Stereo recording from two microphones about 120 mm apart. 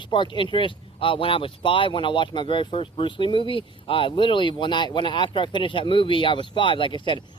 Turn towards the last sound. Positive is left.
turn(degrees=40)  # may be behind; listen again after turning